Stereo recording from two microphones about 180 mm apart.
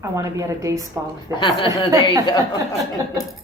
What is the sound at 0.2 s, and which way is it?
Speech, 20° right (ahead or behind).